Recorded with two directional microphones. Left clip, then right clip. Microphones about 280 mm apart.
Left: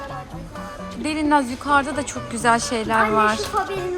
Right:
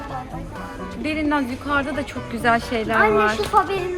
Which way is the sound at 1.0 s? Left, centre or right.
Centre.